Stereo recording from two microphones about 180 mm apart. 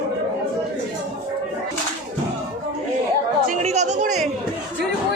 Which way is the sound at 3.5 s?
40° right (ahead or behind).